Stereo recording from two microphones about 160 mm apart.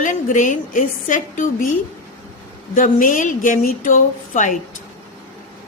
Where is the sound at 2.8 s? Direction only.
55° left (ahead or behind).